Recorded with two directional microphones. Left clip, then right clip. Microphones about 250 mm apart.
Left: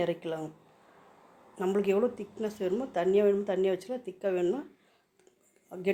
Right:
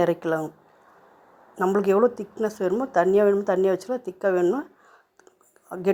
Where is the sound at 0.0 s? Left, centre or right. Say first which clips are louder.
Right 9 dB; right.